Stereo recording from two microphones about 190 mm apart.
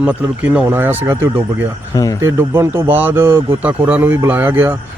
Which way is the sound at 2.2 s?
15° right (ahead or behind).